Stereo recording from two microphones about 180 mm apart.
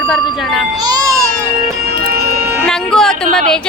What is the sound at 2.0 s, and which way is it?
Music, 60° right (ahead or behind).